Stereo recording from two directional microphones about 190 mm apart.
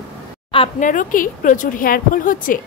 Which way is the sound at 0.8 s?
45° left (ahead or behind).